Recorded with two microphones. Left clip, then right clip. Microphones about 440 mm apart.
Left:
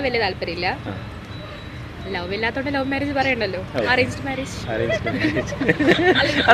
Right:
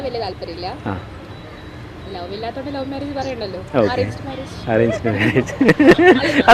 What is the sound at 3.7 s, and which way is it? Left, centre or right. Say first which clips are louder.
Speech: right 2 dB; right.